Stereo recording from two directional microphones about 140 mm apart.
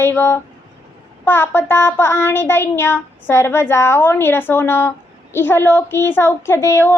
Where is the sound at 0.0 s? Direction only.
15° left (ahead or behind).